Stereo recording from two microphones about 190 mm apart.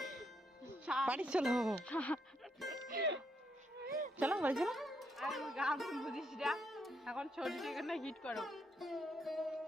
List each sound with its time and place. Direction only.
0.6 s music: 5° right (ahead or behind)
2.9 s music: 60° right (ahead or behind)
3.8 s a sound: 50° right (ahead or behind)
4.2 s speech: 10° right (ahead or behind)